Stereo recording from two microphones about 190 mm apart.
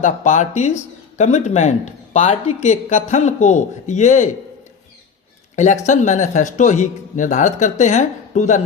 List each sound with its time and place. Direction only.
0.0 s speech: 40° left (ahead or behind)
5.5 s speech: 40° left (ahead or behind)